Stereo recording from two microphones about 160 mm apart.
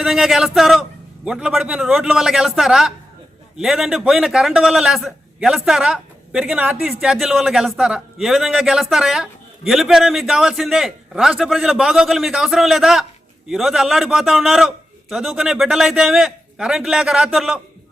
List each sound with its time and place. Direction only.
0.0 s a man's voice: centre (ahead or behind)